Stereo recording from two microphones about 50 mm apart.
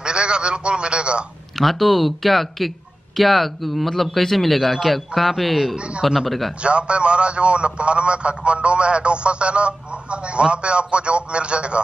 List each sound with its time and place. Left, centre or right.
0.0 s a sound: centre
1.6 s a man's voice: centre
6.6 s a man's voice: right